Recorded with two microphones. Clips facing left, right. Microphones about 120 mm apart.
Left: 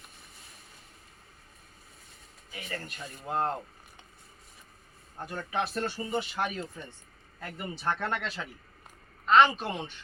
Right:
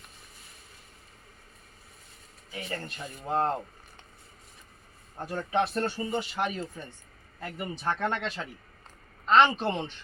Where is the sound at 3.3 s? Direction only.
30° right (ahead or behind).